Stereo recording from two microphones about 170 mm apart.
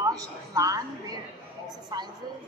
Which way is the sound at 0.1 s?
20° right (ahead or behind).